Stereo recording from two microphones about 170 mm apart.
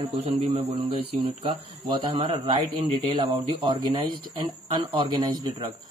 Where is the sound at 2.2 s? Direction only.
30° right (ahead or behind).